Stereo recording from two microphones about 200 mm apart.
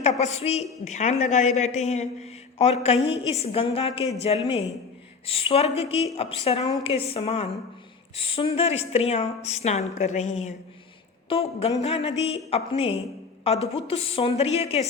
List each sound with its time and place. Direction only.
0.0 s a woman's voice: 35° left (ahead or behind)